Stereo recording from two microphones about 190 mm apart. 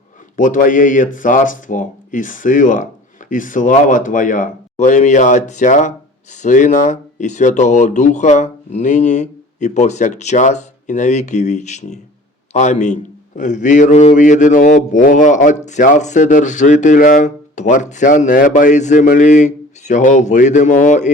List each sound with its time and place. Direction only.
0.3 s a man's voice: 45° left (ahead or behind)